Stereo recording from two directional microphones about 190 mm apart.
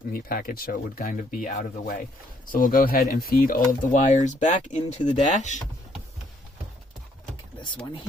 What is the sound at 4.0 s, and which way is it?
Speech, 40° left (ahead or behind).